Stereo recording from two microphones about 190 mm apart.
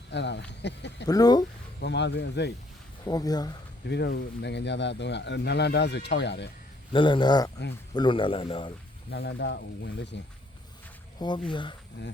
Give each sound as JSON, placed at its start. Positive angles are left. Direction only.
{"t": 0.1, "sound": "speech", "side_deg": 65}
{"t": 1.0, "sound": "a man's voice", "side_deg": 20}
{"t": 1.8, "sound": "speech", "side_deg": 65}
{"t": 3.1, "sound": "a man's voice", "side_deg": 20}
{"t": 3.8, "sound": "speech", "side_deg": 60}
{"t": 6.9, "sound": "a man's voice", "side_deg": 25}
{"t": 9.0, "sound": "speech", "side_deg": 65}
{"t": 11.2, "sound": "a man's voice", "side_deg": 25}